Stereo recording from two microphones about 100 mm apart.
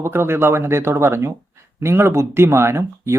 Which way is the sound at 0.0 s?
25° right (ahead or behind).